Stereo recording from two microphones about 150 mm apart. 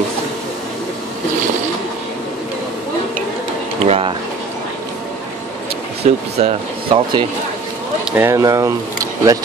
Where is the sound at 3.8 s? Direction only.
40° right (ahead or behind).